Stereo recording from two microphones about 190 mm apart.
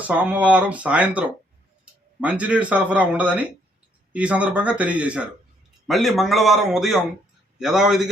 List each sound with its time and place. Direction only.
0.0 s a man's voice: 5° right (ahead or behind)